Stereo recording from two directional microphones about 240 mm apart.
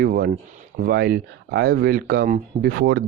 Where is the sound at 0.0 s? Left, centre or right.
Right.